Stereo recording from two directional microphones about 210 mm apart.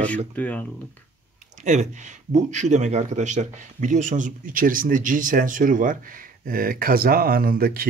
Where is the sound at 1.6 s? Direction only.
35° right (ahead or behind).